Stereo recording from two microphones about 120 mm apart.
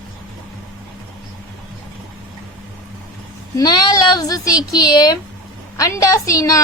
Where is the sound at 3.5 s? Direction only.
35° left (ahead or behind).